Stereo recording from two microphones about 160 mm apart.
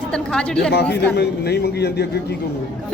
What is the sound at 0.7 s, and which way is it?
A man's voice, 90° left.